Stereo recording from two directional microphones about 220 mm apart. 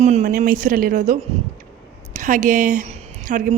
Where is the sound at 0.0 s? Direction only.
30° right (ahead or behind).